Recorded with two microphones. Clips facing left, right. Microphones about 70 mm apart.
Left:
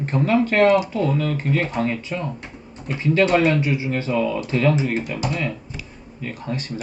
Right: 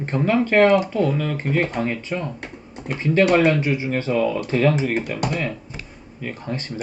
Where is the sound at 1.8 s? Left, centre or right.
Right.